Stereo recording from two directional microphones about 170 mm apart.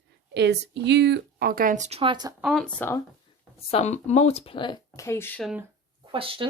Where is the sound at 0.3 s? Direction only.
85° right; by 2.0 s 45° right (ahead or behind).